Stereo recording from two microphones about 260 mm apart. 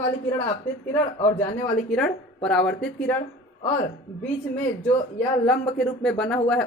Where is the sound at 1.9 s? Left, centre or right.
Centre.